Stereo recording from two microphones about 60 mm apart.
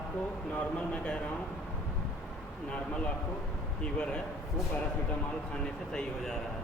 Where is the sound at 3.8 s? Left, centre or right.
Centre.